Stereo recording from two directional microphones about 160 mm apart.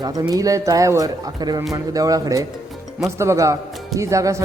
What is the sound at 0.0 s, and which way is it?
Speech, 20° right (ahead or behind).